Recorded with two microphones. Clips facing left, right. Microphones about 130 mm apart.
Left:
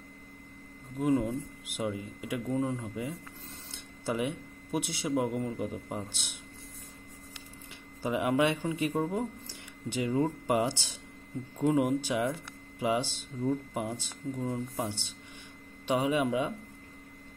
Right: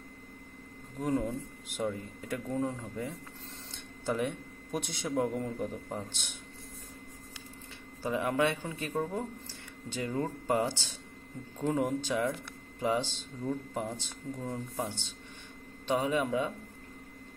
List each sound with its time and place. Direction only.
0.9 s speech: 5° left (ahead or behind)
8.0 s speech: 15° left (ahead or behind)
15.9 s speech: 15° left (ahead or behind)